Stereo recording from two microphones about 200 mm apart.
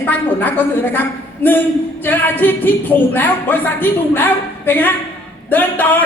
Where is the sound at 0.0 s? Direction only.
10° left (ahead or behind).